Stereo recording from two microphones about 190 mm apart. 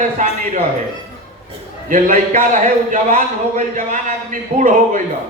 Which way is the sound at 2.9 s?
40° right (ahead or behind).